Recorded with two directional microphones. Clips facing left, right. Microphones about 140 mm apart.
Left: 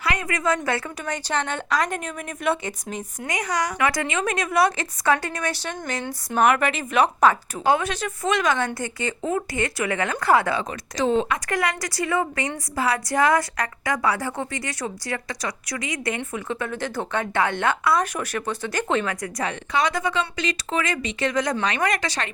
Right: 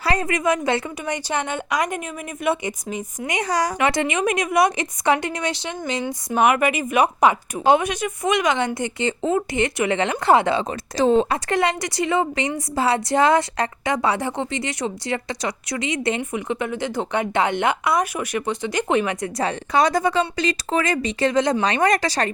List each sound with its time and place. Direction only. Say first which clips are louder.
0.0 s a sound: right 5 dB; 35° right (ahead or behind)
0.3 s speech: right 3 dB; 20° right (ahead or behind)
3.3 s a woman's voice: right 3 dB; 30° right (ahead or behind)